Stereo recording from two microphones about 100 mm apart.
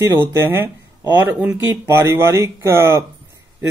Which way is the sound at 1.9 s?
25° right (ahead or behind).